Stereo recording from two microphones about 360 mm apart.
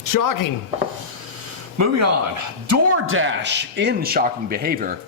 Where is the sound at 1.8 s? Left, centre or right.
Right.